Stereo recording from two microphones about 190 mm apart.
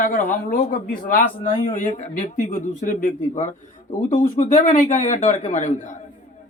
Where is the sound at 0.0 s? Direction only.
45° left (ahead or behind).